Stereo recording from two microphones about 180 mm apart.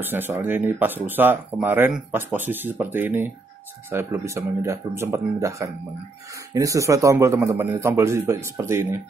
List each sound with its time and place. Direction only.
0.0 s speech: 10° right (ahead or behind)